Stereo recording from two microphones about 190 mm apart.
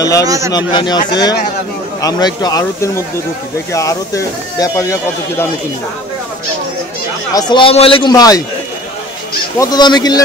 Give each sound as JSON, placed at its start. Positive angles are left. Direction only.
{"t": 0.0, "sound": "a man's voice", "side_deg": 20}
{"t": 7.3, "sound": "a man's voice", "side_deg": 25}
{"t": 9.6, "sound": "a man's voice", "side_deg": 20}